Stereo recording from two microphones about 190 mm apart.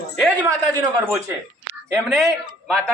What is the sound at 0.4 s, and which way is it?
Speech, 20° right (ahead or behind).